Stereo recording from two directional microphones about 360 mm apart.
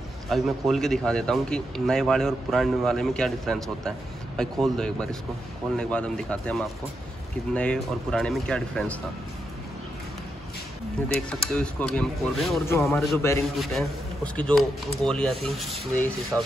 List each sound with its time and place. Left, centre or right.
0.3 s speech: centre
11.1 s speech: centre